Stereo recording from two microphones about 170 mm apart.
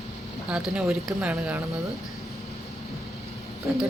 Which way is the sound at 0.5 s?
5° right (ahead or behind).